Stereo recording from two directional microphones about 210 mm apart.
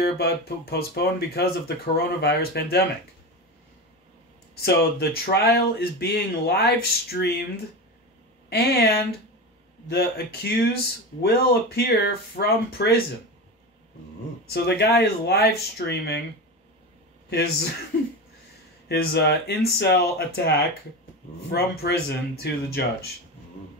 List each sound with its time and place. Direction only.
0.0 s speech: 50° left (ahead or behind)
4.6 s speech: 50° left (ahead or behind)
8.5 s speech: 50° left (ahead or behind)
14.5 s speech: 50° left (ahead or behind)
17.3 s speech: 50° left (ahead or behind)
18.9 s speech: 50° left (ahead or behind)